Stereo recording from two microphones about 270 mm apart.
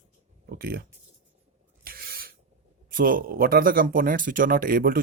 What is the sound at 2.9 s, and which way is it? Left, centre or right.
Speech, right.